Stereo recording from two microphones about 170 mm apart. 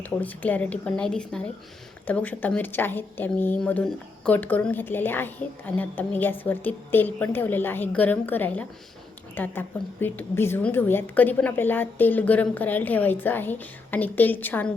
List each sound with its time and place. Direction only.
0.0 s speech: 10° left (ahead or behind)